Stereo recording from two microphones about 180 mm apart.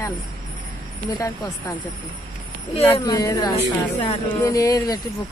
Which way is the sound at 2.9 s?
20° left (ahead or behind).